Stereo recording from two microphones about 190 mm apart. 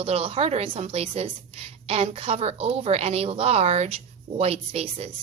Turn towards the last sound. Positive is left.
turn(degrees=-30)  # may be behind; listen again after turning